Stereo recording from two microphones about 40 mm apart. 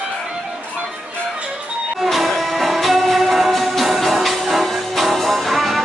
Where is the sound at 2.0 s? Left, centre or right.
Centre.